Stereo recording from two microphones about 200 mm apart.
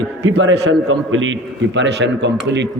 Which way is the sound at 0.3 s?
60° right (ahead or behind).